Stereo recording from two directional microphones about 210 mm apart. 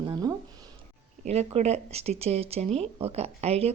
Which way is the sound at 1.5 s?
30° right (ahead or behind).